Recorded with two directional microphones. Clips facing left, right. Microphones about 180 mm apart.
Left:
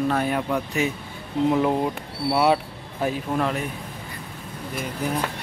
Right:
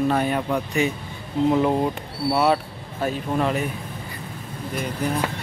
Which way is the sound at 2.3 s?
10° left (ahead or behind).